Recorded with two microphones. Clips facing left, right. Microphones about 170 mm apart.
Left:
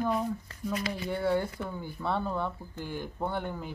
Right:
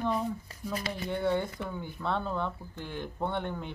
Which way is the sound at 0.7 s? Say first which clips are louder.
Left 1 dB; 35° right (ahead or behind).